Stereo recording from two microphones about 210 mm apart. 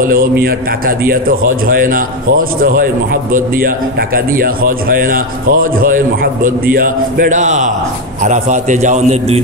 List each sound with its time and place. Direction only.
0.0 s a man's voice: 45° right (ahead or behind)